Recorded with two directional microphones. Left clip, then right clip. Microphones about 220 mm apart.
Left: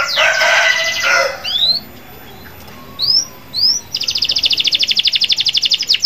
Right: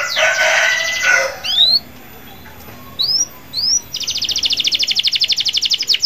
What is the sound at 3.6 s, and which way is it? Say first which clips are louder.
Chirp: left 2 dB; 10° right (ahead or behind).